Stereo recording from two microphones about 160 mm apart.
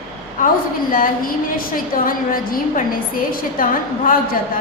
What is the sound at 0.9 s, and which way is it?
A woman's voice, 60° left (ahead or behind).